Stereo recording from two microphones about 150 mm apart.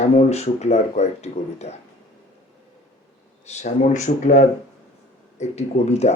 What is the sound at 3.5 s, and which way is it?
Speech, 50° left (ahead or behind).